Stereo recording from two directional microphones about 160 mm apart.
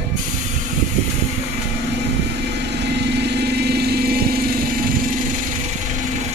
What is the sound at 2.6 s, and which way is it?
Vehicle, 90° right.